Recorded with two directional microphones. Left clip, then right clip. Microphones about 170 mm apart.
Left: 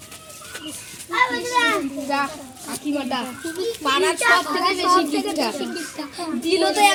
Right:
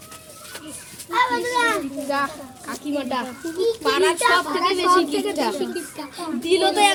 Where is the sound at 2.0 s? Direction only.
Centre (ahead or behind).